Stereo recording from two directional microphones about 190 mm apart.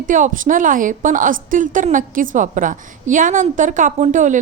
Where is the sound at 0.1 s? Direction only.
45° right (ahead or behind).